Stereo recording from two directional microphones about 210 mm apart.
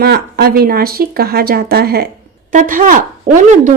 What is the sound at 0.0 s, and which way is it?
Speech, 50° right (ahead or behind).